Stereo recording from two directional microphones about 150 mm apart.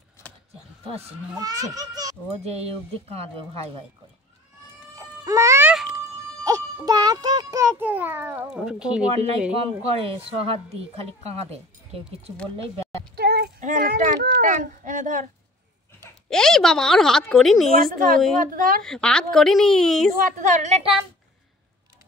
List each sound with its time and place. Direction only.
1.4 s a child's voice: 25° right (ahead or behind)
2.4 s speech: 45° right (ahead or behind)
4.9 s baby cry: 20° right (ahead or behind)
6.4 s a child's voice: 25° right (ahead or behind); by 9.0 s 5° right (ahead or behind)
9.1 s a woman's voice: 45° right (ahead or behind)
13.1 s a sound: 90° right; by 14.5 s 75° right (ahead or behind)
14.5 s speech: 55° right (ahead or behind)
16.3 s a woman's voice: 5° left (ahead or behind)
17.9 s speech: 65° right (ahead or behind)
18.8 s a woman's voice: 5° left (ahead or behind)
20.2 s speech: 55° right (ahead or behind)